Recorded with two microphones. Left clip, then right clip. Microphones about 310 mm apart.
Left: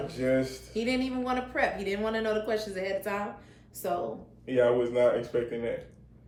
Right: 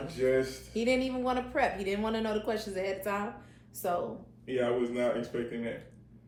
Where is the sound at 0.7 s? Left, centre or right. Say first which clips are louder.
Right 1 dB; centre.